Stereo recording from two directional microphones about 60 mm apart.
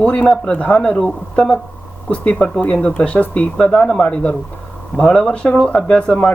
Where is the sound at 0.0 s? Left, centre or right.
Centre.